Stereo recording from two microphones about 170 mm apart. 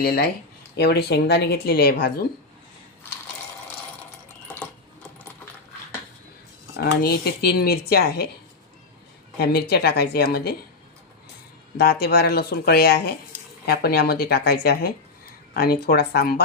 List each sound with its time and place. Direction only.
0.8 s speech: 75° left (ahead or behind)
6.7 s speech: 65° left (ahead or behind)
9.4 s speech: 65° left (ahead or behind)
11.8 s speech: 70° left (ahead or behind)